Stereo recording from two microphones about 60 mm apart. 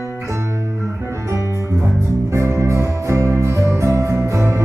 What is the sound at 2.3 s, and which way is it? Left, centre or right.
Music, right.